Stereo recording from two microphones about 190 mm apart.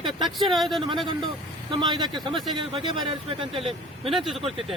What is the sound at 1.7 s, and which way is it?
Speech, 25° right (ahead or behind).